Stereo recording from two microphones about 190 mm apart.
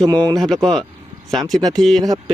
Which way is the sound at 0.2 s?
5° left (ahead or behind).